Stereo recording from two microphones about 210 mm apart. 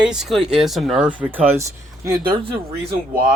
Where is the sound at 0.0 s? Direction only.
5° right (ahead or behind).